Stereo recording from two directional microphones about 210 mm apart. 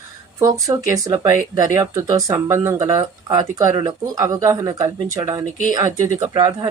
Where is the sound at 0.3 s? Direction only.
15° right (ahead or behind).